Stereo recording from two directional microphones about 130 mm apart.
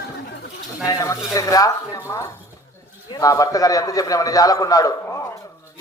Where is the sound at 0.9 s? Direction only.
25° left (ahead or behind).